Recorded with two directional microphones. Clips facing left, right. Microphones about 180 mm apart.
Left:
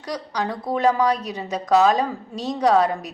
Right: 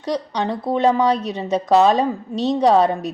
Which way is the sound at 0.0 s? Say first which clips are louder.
Right 4 dB; 25° right (ahead or behind).